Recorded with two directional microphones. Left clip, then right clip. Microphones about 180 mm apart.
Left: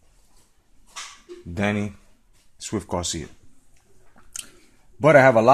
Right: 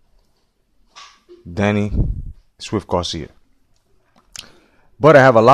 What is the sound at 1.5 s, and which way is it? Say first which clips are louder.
A man's voice: right 6 dB; 40° right (ahead or behind).